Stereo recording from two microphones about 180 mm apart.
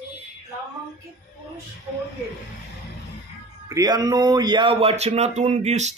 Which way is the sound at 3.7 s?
20° right (ahead or behind).